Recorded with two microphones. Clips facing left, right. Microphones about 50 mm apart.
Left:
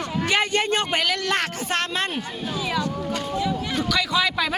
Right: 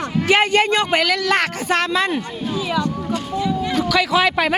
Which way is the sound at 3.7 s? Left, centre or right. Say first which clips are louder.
Right 8 dB; right.